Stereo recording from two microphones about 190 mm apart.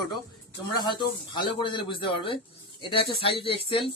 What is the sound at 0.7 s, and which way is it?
Speech, 25° left (ahead or behind).